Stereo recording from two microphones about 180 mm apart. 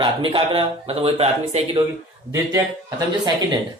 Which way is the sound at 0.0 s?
30° right (ahead or behind).